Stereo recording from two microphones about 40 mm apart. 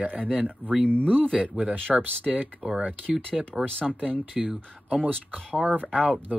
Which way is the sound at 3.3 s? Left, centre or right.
Centre.